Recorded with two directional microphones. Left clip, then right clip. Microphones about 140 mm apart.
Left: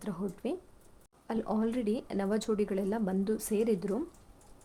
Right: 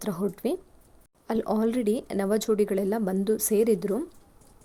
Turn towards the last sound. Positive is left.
turn(degrees=-25)  # may be behind; listen again after turning